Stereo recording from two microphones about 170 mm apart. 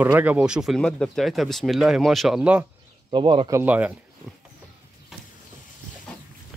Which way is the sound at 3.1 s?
30° right (ahead or behind).